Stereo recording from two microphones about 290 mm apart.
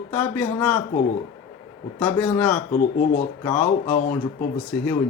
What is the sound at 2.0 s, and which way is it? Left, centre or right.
Speech, centre.